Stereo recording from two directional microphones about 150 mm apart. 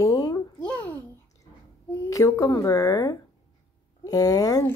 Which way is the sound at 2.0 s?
25° left (ahead or behind).